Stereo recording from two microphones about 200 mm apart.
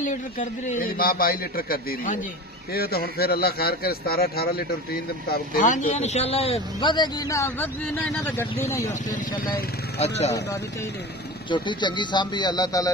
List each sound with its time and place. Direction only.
0.0 s a man's voice: 40° left (ahead or behind); by 8.9 s 15° left (ahead or behind)
9.1 s speech: 40° left (ahead or behind)
11.5 s a man's voice: 25° left (ahead or behind)